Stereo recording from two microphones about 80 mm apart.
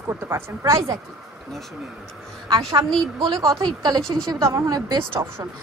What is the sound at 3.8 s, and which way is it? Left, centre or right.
Speech, right.